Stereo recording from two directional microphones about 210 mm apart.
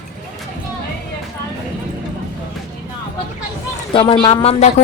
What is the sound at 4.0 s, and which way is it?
Speech, 25° left (ahead or behind).